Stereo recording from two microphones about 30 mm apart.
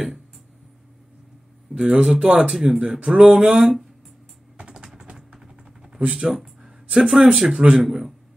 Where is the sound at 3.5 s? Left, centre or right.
Centre.